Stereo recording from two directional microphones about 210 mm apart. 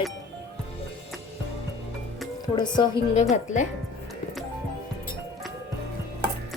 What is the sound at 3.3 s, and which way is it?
Speech, 35° left (ahead or behind).